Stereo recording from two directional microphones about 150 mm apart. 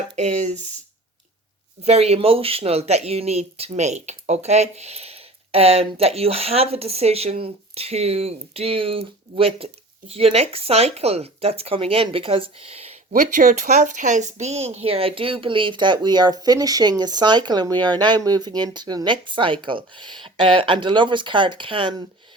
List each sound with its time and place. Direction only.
0.2 s speech: 50° right (ahead or behind)
1.8 s speech: 45° right (ahead or behind)
13.3 s speech: 65° right (ahead or behind); by 21.9 s 35° right (ahead or behind)